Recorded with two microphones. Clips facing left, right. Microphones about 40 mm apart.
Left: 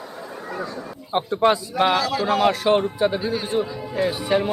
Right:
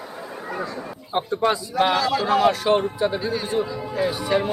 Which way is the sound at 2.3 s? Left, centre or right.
Centre.